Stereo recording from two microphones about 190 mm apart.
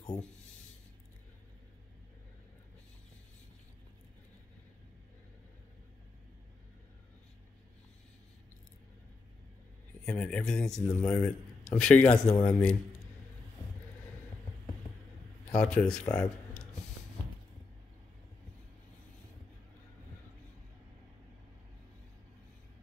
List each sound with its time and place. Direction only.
10.0 s a man's voice: 5° left (ahead or behind)
15.5 s speech: 5° left (ahead or behind)